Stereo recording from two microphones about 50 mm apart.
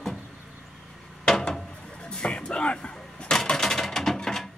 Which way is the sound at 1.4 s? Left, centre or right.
Centre.